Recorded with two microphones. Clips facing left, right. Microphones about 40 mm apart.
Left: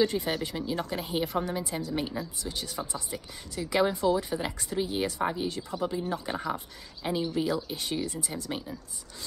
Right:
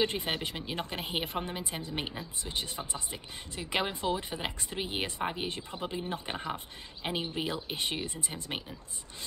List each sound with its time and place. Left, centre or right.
0.0 s a woman's voice: right